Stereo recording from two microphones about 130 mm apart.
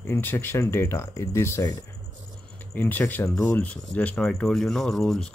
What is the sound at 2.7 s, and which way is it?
Speech, 15° left (ahead or behind).